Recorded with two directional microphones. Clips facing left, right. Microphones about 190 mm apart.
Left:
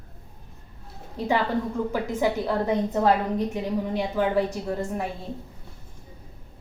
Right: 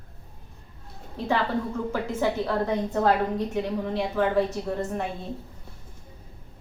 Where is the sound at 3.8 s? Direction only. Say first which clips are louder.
Left 1 dB; 10° left (ahead or behind).